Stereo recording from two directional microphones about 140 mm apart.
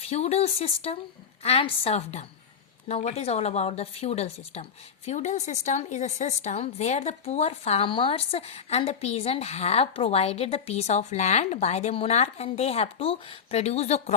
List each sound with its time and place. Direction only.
0.0 s a woman's voice: 50° left (ahead or behind)